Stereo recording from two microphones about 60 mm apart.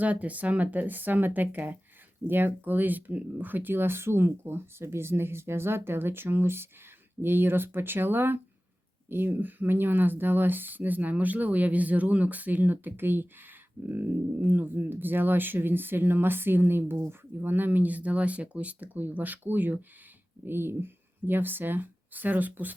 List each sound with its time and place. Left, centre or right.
0.0 s speech: right